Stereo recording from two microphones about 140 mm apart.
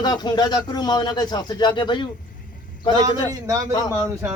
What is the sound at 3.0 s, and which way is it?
Speech, 25° right (ahead or behind).